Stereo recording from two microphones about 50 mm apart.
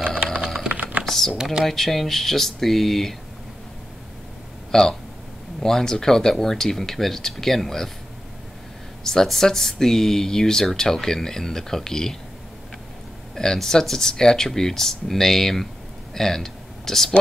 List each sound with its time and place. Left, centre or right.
0.0 s typing: right
1.0 s typing: centre
1.4 s speech: centre
1.7 s speech: centre
4.6 s speech: centre
9.0 s speech: centre
13.3 s speech: centre